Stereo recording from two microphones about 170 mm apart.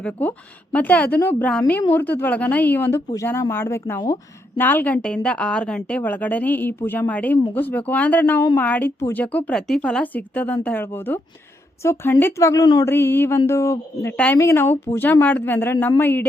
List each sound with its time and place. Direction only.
0.0 s speech: 10° left (ahead or behind)